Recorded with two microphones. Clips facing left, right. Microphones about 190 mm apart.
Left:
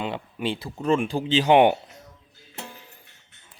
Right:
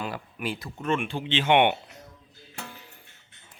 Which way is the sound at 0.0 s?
25° left (ahead or behind).